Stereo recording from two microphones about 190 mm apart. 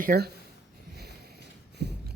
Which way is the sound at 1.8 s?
60° right (ahead or behind).